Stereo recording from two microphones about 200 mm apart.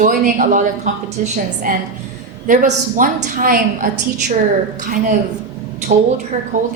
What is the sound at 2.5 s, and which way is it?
A woman's voice, 40° right (ahead or behind).